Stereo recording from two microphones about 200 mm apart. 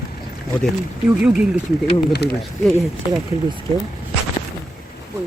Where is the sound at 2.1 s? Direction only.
55° left (ahead or behind).